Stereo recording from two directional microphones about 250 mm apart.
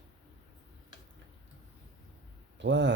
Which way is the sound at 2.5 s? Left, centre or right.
Right.